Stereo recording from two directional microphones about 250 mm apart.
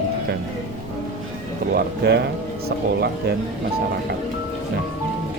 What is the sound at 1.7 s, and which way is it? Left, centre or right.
Speech, right.